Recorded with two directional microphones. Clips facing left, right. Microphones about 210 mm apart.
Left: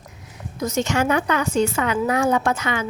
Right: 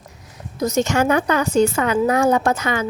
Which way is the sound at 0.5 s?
40° right (ahead or behind).